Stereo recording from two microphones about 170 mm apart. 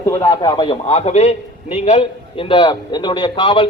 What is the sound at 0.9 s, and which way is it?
A man's voice, 40° left (ahead or behind).